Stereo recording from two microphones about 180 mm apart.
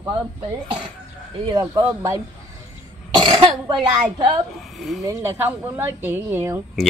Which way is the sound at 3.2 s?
30° right (ahead or behind).